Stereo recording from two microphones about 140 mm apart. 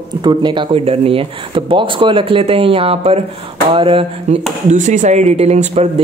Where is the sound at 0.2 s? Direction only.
30° right (ahead or behind).